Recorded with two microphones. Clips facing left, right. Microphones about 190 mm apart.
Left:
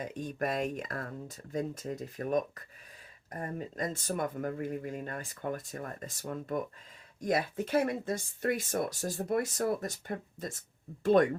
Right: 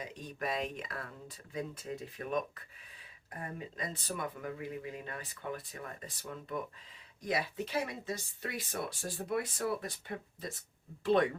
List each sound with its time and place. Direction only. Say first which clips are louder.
0.0 s speech: left 5 dB; 50° left (ahead or behind)